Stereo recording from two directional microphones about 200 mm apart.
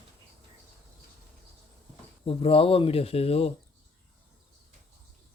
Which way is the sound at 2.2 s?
30° left (ahead or behind).